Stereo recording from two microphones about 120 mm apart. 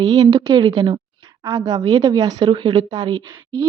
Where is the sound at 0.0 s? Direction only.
30° right (ahead or behind).